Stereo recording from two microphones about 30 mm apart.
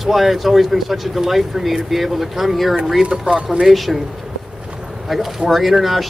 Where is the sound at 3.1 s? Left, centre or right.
Right.